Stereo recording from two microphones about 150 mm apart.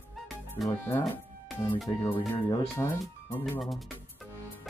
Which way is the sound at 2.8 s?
20° left (ahead or behind).